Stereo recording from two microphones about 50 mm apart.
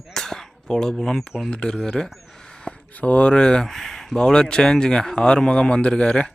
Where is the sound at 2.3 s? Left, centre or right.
Centre.